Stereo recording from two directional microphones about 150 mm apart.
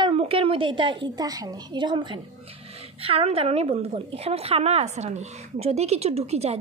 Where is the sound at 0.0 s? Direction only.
40° right (ahead or behind).